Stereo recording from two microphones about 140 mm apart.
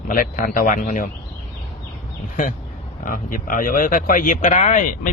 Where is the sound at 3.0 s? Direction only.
80° left; by 5.0 s 65° left (ahead or behind).